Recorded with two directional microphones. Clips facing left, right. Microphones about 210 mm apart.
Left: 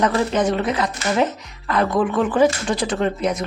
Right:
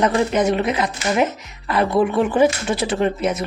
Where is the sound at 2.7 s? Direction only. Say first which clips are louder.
Right 1 dB; 5° right (ahead or behind).